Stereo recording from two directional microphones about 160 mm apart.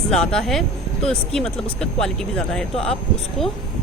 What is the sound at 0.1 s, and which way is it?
Speech, 5° left (ahead or behind).